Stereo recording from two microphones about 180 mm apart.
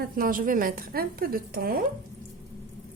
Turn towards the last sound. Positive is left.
turn(degrees=-55)  # may be behind; listen again after turning